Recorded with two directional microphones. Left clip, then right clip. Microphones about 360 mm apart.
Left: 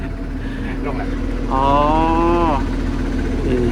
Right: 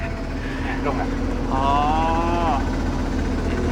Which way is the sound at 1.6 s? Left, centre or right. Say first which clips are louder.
Left 5 dB; centre.